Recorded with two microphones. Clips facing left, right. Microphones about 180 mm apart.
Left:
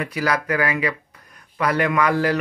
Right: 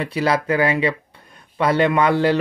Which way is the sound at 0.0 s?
30° right (ahead or behind).